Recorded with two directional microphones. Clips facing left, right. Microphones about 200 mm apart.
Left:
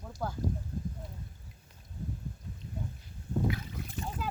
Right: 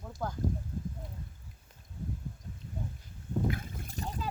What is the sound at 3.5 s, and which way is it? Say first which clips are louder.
Boat: left 1 dB; 50° right (ahead or behind).